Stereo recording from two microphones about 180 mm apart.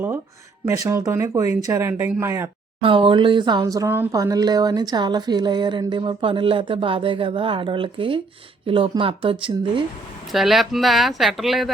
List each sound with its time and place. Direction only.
0.8 s speech: 20° right (ahead or behind)
2.8 s speech: 30° right (ahead or behind)
10.3 s speech: centre (ahead or behind)